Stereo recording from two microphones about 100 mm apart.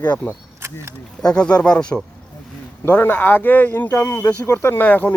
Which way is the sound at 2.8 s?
20° left (ahead or behind).